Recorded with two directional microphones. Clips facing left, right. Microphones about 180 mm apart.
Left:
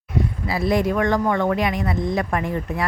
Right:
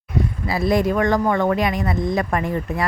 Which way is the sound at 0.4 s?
40° right (ahead or behind).